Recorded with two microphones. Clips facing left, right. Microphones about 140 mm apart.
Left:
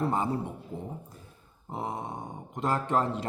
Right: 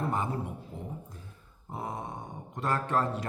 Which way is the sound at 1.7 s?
25° left (ahead or behind).